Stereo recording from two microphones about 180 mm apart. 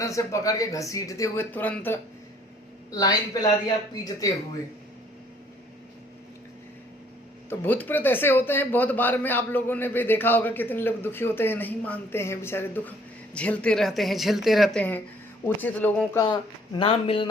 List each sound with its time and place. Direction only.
0.0 s speech: 15° left (ahead or behind)
2.9 s speech: 20° left (ahead or behind)
7.5 s speech: 10° left (ahead or behind)
16.2 s speech: 25° left (ahead or behind)